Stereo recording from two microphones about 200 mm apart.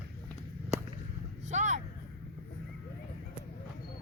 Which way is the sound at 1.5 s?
35° right (ahead or behind).